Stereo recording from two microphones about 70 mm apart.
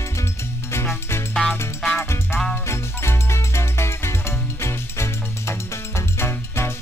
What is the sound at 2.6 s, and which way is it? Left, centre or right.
Music, left.